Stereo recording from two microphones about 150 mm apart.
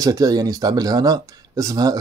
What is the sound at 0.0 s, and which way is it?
Speech, 25° right (ahead or behind).